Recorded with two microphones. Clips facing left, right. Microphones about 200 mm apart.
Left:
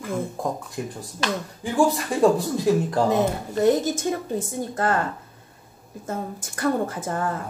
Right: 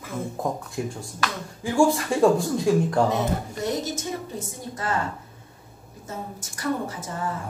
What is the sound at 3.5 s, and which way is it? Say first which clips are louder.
A woman's voice: left 8 dB; 50° left (ahead or behind).